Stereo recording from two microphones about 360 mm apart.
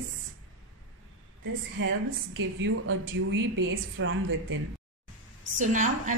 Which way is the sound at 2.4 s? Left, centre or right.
Right.